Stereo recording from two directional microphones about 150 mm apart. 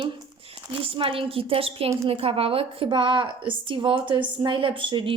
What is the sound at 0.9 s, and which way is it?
Speech, 35° right (ahead or behind).